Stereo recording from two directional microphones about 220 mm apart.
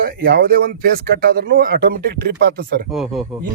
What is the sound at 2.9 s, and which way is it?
Speech, centre (ahead or behind).